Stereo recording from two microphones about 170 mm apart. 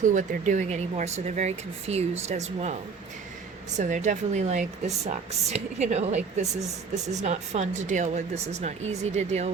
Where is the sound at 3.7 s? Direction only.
45° right (ahead or behind).